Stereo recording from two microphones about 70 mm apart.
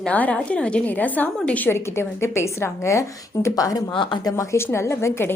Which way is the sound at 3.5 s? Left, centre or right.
Left.